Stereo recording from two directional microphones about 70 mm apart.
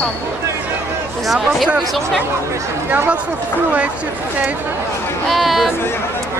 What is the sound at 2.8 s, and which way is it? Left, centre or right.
Speech, right.